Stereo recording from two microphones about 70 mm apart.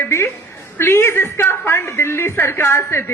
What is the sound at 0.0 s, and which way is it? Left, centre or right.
A woman's voice, left.